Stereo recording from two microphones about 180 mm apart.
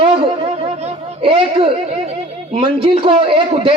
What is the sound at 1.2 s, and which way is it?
A woman's voice, 30° right (ahead or behind).